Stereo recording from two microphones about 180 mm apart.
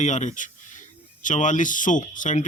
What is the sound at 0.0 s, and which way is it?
A man's voice, 40° left (ahead or behind).